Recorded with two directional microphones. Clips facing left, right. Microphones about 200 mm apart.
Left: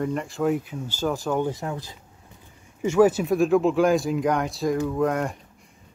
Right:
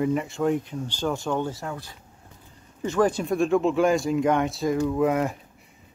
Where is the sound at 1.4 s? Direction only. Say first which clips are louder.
Left 3 dB; 15° left (ahead or behind).